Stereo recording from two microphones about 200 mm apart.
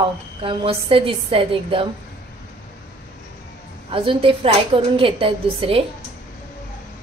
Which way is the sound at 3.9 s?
25° right (ahead or behind).